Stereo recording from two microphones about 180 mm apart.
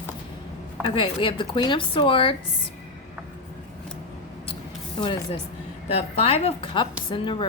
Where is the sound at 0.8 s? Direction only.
30° left (ahead or behind).